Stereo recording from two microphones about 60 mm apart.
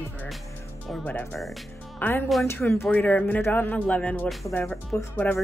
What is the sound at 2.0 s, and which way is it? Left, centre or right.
A woman's voice, left.